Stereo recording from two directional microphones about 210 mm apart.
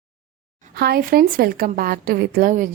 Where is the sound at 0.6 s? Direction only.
50° right (ahead or behind).